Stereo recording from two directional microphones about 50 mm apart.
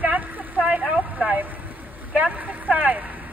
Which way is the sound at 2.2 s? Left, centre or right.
Right.